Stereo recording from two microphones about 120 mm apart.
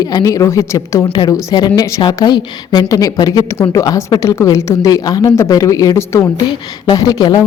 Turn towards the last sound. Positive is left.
turn(degrees=35)  # may be behind; listen again after turning